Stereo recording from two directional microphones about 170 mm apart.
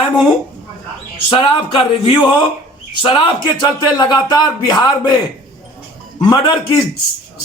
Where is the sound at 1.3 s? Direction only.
30° left (ahead or behind).